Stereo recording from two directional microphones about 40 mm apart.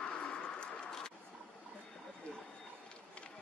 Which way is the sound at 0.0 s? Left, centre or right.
Left.